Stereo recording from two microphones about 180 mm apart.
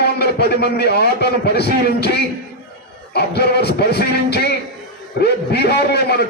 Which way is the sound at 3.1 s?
65° left (ahead or behind).